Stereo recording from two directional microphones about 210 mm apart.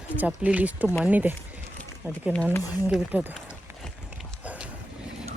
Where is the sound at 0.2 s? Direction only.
5° right (ahead or behind).